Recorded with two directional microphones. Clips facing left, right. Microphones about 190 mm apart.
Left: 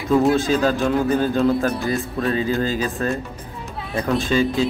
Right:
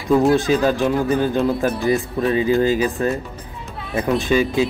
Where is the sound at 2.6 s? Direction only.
15° right (ahead or behind).